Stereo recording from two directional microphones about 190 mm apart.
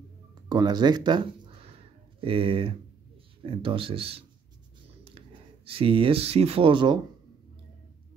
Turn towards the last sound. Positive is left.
turn(degrees=-25)  # may be behind; listen again after turning